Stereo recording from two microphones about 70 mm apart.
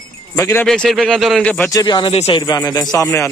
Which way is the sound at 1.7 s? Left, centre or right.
Left.